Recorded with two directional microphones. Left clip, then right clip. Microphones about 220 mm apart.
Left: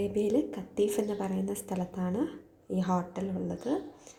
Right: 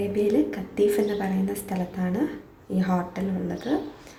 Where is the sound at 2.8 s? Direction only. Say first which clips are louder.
Right 4 dB; 15° left (ahead or behind).